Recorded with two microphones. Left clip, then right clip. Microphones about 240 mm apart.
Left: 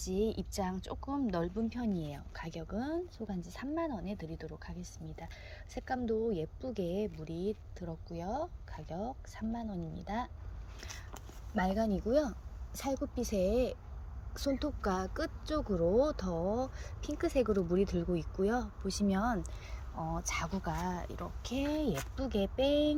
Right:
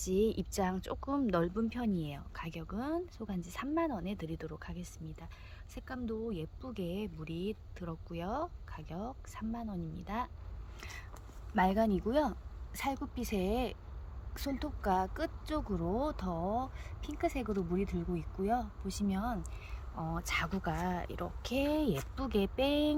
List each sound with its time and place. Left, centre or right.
0.0 s a woman's voice: centre
5.7 s a woman's voice: centre
11.5 s a woman's voice: centre
20.0 s a woman's voice: right